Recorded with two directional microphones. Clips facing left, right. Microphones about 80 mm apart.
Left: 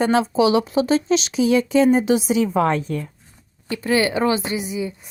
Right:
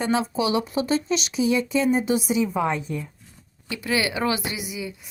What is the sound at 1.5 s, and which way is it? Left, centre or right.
A woman's voice, left.